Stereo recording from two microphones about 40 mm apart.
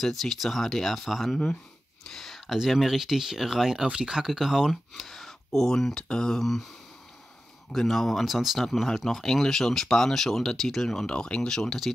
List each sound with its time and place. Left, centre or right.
0.0 s speech: centre
1.3 s speech: left
2.1 s a sound: centre
2.5 s speech: centre
3.8 s speech: centre
4.9 s speech: centre
7.7 s speech: centre
8.3 s speech: centre
8.5 s speech: centre
11.1 s speech: left